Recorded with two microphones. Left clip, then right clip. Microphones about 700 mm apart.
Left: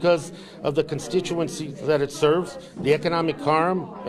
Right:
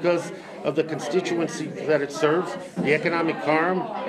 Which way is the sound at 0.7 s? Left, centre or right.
Left.